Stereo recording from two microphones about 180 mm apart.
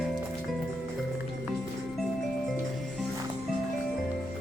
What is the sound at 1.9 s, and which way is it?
Music, centre (ahead or behind).